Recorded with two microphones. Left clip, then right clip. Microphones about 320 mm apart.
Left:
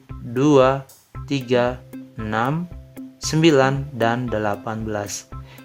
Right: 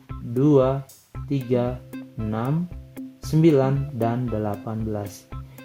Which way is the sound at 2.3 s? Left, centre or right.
Left.